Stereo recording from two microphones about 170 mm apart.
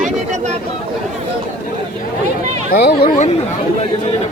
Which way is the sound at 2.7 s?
65° left (ahead or behind).